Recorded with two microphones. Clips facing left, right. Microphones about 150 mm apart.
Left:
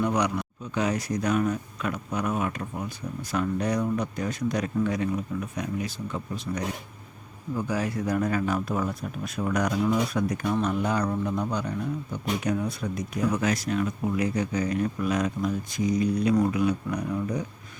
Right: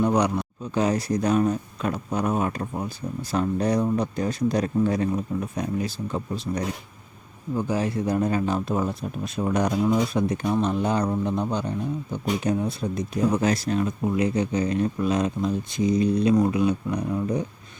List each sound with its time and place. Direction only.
0.0 s speech: 30° right (ahead or behind)